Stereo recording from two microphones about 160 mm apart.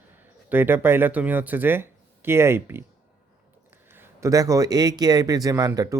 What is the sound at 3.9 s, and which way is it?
A man's voice, 15° right (ahead or behind).